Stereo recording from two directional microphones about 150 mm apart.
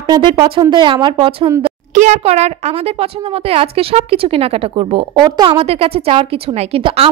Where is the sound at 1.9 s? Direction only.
50° right (ahead or behind).